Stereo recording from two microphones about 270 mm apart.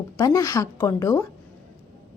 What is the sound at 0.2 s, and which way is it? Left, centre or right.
A woman's voice, centre.